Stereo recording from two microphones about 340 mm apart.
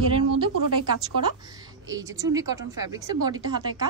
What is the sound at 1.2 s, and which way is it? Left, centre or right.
A woman's voice, centre.